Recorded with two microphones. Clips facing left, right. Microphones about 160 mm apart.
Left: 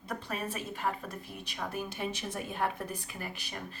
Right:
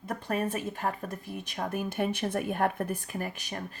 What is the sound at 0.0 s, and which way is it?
Speech, 45° right (ahead or behind).